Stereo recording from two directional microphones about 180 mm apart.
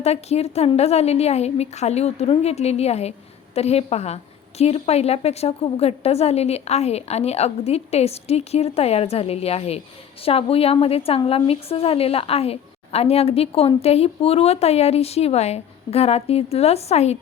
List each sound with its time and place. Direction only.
0.0 s a woman's voice: 35° left (ahead or behind)